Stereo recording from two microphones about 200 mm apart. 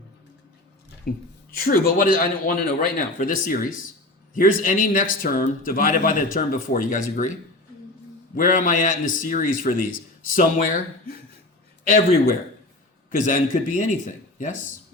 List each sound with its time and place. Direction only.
1.1 s speech: 50° left (ahead or behind)
8.4 s a man's voice: 40° left (ahead or behind)
13.1 s speech: 40° left (ahead or behind)